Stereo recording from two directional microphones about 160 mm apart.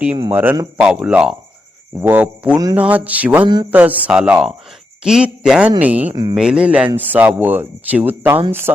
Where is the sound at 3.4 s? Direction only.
25° right (ahead or behind).